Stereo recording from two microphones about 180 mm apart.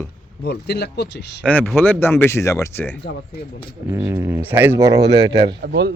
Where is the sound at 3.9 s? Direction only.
15° right (ahead or behind).